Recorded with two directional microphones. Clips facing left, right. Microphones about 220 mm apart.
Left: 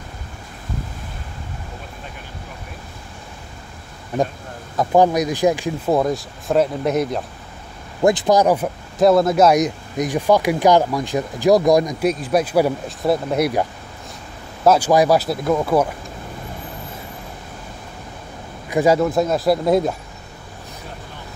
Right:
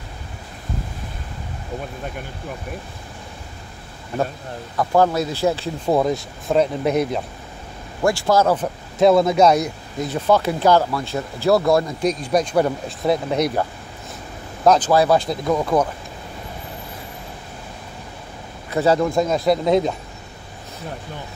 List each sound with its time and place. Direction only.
4.7 s speech: 15° left (ahead or behind)
5.9 s speech: centre (ahead or behind)
8.0 s speech: 20° left (ahead or behind)
9.0 s speech: centre (ahead or behind)
9.6 s speech: 15° left (ahead or behind)
18.7 s speech: 10° left (ahead or behind)